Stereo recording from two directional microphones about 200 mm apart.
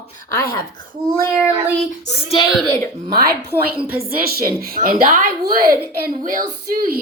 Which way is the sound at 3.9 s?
50° right (ahead or behind).